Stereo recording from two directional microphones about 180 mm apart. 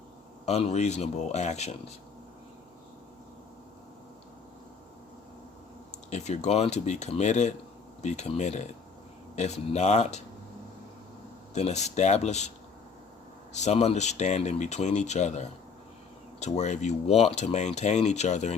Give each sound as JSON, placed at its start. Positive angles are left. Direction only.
{"t": 0.4, "sound": "speech", "side_deg": 35}
{"t": 6.1, "sound": "speech", "side_deg": 40}
{"t": 11.5, "sound": "speech", "side_deg": 40}
{"t": 13.5, "sound": "speech", "side_deg": 40}